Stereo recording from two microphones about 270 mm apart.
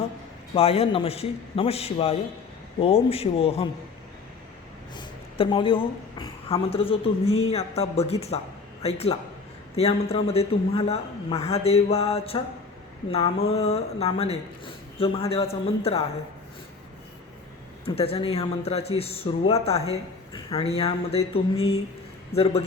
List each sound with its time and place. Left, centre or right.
0.5 s speech: left
4.9 s a woman's voice: centre
17.8 s speech: left
21.5 s chink: left
22.3 s speech: left